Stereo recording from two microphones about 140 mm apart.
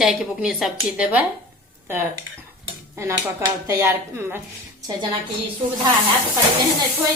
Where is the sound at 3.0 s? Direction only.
25° right (ahead or behind).